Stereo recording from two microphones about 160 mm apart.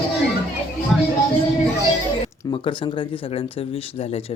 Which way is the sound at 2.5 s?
30° left (ahead or behind).